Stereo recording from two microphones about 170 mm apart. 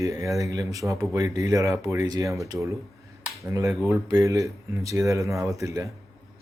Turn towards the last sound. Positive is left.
turn(degrees=-20)  # may be behind; listen again after turning